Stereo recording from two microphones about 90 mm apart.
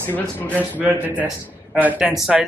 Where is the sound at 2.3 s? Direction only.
5° right (ahead or behind).